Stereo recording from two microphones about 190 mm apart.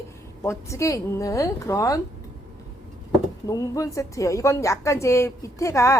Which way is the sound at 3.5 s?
15° left (ahead or behind).